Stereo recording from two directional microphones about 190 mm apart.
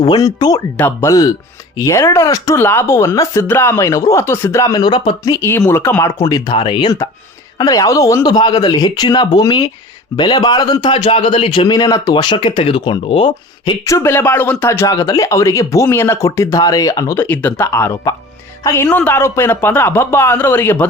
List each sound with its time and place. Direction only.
0.0 s a man's voice: 20° left (ahead or behind)